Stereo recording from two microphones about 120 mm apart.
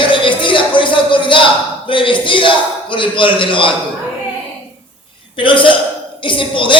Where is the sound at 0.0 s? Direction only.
45° left (ahead or behind).